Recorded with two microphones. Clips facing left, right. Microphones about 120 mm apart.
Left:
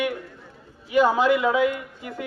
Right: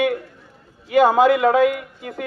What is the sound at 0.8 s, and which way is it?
Speech, 80° right.